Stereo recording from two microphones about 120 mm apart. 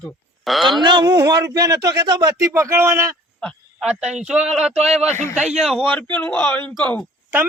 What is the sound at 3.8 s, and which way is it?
Speech, 5° right (ahead or behind).